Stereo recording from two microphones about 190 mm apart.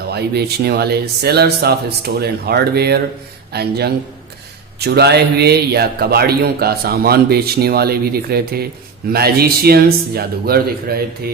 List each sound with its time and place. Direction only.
0.1 s a man's voice: 60° right (ahead or behind)